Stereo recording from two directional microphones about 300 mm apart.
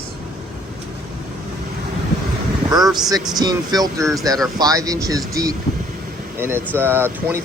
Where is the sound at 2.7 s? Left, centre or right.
Centre.